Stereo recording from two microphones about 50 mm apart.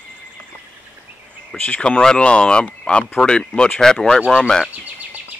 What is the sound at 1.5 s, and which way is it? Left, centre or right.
Speech, left.